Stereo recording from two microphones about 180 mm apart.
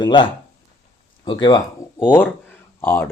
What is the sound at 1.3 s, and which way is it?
Speech, 25° left (ahead or behind).